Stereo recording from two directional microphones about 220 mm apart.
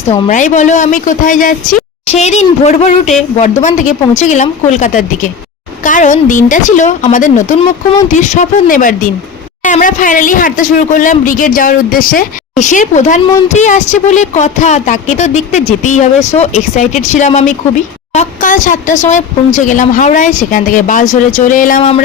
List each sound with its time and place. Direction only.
0.0 s a woman's voice: 30° left (ahead or behind)